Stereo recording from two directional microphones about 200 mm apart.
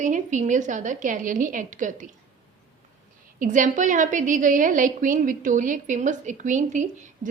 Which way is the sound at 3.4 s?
40° right (ahead or behind).